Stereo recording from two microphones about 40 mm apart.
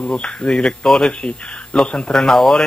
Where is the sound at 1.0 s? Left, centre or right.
Left.